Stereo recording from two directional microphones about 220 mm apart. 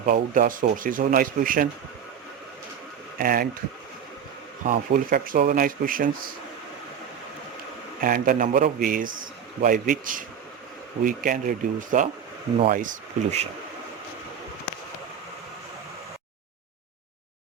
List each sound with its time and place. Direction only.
0.0 s a man's voice: 40° right (ahead or behind)
3.2 s a man's voice: 40° right (ahead or behind)
4.6 s a man's voice: 40° right (ahead or behind)
8.0 s a man's voice: 40° right (ahead or behind)